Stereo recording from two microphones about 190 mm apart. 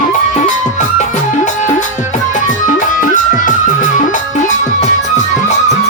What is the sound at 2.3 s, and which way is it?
Music, 45° left (ahead or behind).